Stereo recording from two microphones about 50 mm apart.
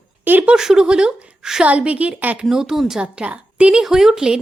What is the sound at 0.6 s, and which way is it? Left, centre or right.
Speech, centre.